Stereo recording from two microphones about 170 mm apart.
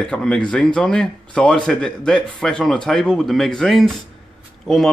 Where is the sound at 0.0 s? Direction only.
5° left (ahead or behind).